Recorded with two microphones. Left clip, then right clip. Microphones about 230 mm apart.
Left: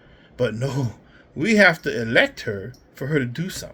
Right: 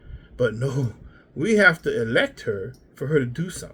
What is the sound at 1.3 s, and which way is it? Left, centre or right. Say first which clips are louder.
Speech: even; centre.